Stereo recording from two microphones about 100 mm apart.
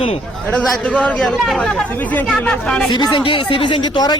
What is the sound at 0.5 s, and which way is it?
Speech, 10° left (ahead or behind).